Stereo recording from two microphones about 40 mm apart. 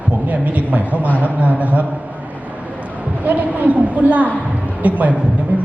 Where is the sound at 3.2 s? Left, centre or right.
Right.